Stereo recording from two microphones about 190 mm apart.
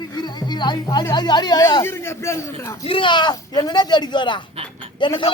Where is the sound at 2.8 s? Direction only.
25° left (ahead or behind).